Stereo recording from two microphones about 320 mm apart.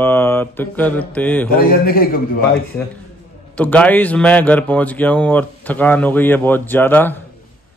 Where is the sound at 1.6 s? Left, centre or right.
Left.